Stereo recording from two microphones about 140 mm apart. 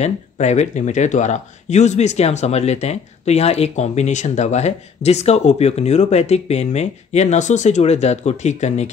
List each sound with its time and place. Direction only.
0.0 s speech: 55° left (ahead or behind)